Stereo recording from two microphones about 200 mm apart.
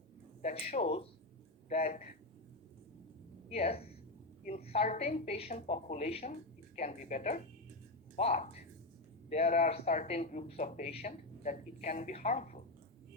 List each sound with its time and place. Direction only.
0.4 s speech: 35° left (ahead or behind)
3.5 s speech: 30° left (ahead or behind)